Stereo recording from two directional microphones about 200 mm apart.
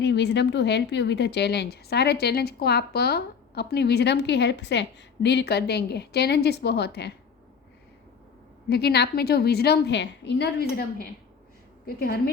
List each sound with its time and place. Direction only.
0.0 s a woman's voice: 60° left (ahead or behind)
8.7 s a woman's voice: 55° left (ahead or behind)